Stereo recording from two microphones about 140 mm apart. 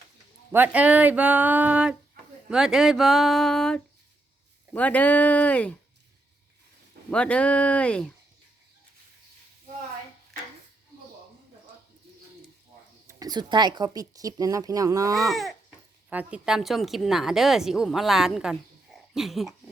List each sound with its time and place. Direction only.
0.5 s speech: 10° right (ahead or behind); by 5.7 s 10° left (ahead or behind)
7.1 s speech: 10° left (ahead or behind)
13.1 s speech: 25° right (ahead or behind)
15.3 s speech: centre (ahead or behind)